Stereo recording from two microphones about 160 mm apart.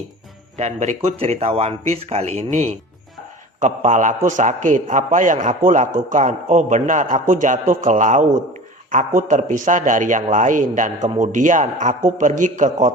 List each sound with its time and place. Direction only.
0.5 s a man's voice: 45° right (ahead or behind)